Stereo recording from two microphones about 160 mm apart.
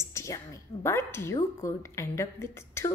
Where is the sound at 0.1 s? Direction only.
20° left (ahead or behind).